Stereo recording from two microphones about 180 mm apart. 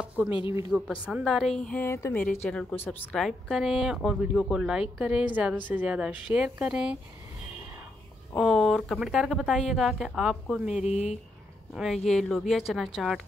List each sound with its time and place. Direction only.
0.0 s a sound: 5° right (ahead or behind)
0.5 s a woman's voice: 15° right (ahead or behind)
1.0 s a woman's voice: 5° right (ahead or behind)
8.4 s speech: centre (ahead or behind)
10.9 s speech: 40° left (ahead or behind)
11.7 s speech: centre (ahead or behind)